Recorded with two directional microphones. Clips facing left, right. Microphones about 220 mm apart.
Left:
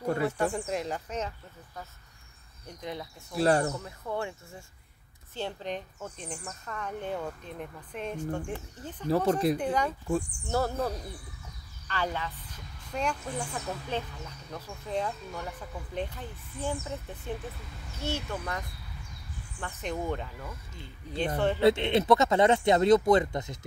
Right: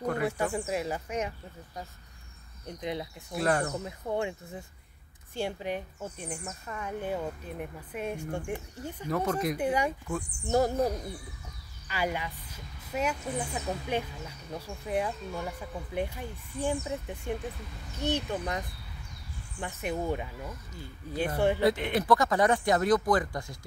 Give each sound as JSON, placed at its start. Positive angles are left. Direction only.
{"t": 0.2, "sound": "speech", "side_deg": -10}
{"t": 2.6, "sound": "speech", "side_deg": -20}
{"t": 3.3, "sound": "speech", "side_deg": 30}
{"t": 3.8, "sound": "speech", "side_deg": -20}
{"t": 21.6, "sound": "speech", "side_deg": 25}